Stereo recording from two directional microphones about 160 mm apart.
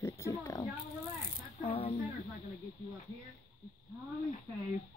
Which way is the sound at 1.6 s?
35° left (ahead or behind).